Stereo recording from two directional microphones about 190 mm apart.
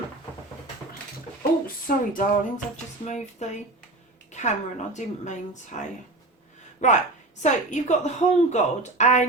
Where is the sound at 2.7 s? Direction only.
40° left (ahead or behind).